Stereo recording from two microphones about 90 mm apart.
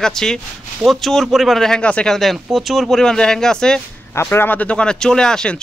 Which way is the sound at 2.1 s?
Centre (ahead or behind).